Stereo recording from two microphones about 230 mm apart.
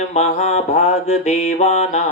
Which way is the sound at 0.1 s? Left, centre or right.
Left.